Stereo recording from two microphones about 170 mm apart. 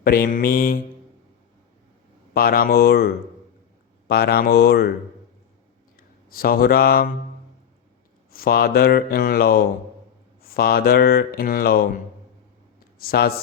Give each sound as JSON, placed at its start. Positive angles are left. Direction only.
{"t": 0.0, "sound": "speech", "side_deg": 60}
{"t": 2.3, "sound": "speech", "side_deg": 60}
{"t": 4.1, "sound": "speech", "side_deg": 65}
{"t": 6.0, "sound": "speech", "side_deg": 60}
{"t": 8.3, "sound": "speech", "side_deg": 60}
{"t": 13.0, "sound": "speech", "side_deg": 65}